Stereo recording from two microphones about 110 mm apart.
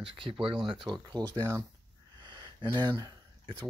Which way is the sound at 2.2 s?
45° right (ahead or behind).